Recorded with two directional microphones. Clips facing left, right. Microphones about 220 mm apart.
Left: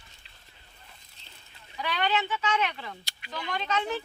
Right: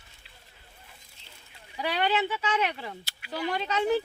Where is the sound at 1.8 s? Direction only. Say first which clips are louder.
Right 2 dB; 35° right (ahead or behind).